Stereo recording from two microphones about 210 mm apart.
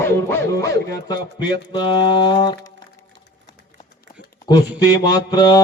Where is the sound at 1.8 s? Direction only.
20° left (ahead or behind).